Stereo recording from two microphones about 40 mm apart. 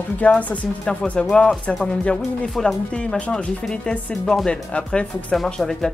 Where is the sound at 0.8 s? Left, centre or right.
Left.